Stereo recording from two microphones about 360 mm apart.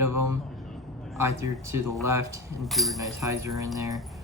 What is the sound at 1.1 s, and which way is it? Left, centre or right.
A man's voice, centre.